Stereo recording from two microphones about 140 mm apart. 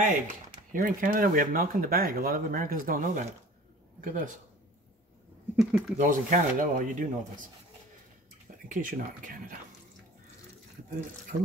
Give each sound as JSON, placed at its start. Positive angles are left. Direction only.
{"t": 0.0, "sound": "speech", "side_deg": -70}
{"t": 5.6, "sound": "speech", "side_deg": -5}
{"t": 5.9, "sound": "speech", "side_deg": -65}
{"t": 8.6, "sound": "speech", "side_deg": -70}